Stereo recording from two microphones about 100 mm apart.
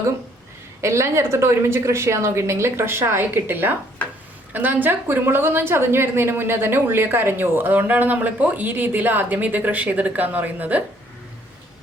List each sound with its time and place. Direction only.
0.8 s a woman's voice: 30° right (ahead or behind)